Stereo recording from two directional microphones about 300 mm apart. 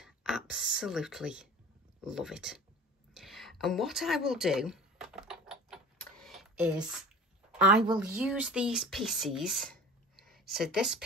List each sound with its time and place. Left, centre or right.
0.0 s speech: centre
3.2 s a sound: centre
8.0 s speech: centre